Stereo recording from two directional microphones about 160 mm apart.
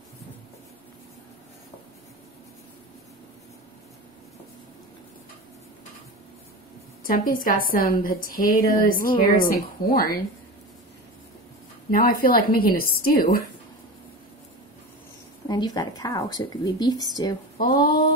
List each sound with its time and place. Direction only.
7.0 s a woman's voice: 60° left (ahead or behind)
11.9 s a woman's voice: 60° left (ahead or behind)
15.4 s speech: 25° left (ahead or behind)
17.6 s a sound: 65° left (ahead or behind)